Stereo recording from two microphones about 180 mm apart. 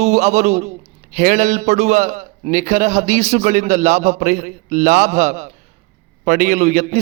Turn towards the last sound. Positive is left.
turn(degrees=-40)  # may be behind; listen again after turning